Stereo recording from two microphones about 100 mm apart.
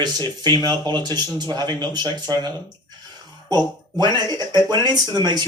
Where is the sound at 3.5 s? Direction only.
40° right (ahead or behind).